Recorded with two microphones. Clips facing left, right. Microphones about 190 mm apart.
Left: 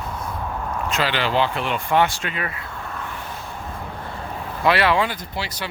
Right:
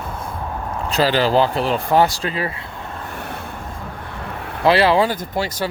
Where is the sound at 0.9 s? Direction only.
35° right (ahead or behind).